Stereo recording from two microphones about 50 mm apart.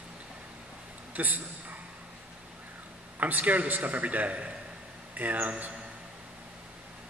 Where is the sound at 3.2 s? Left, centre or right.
Right.